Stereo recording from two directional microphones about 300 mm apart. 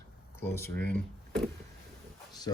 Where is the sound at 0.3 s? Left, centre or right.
Centre.